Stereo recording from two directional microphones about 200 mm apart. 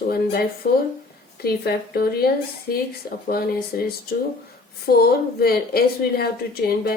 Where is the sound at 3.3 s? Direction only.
50° left (ahead or behind).